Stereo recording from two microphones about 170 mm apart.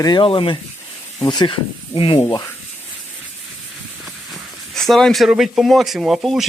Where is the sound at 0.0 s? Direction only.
25° left (ahead or behind).